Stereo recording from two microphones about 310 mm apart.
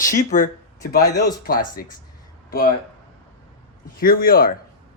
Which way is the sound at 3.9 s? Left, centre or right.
Left.